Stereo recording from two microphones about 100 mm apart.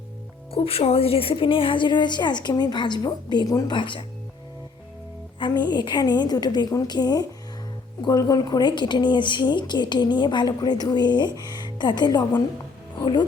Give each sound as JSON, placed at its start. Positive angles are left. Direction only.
{"t": 0.5, "sound": "a woman's voice", "side_deg": 75}
{"t": 3.8, "sound": "a woman's voice", "side_deg": 55}
{"t": 5.4, "sound": "a woman's voice", "side_deg": 45}